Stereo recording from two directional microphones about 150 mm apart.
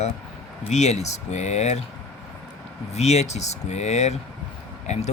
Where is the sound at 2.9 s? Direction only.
45° left (ahead or behind).